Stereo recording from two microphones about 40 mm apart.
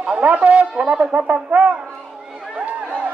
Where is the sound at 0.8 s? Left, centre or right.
Right.